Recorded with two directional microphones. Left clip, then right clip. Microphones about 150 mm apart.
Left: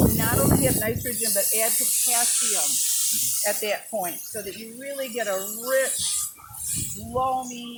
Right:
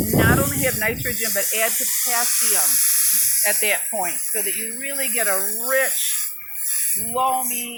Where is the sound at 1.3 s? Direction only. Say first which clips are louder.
Right 2 dB; 55° right (ahead or behind); by 3.4 s 35° right (ahead or behind).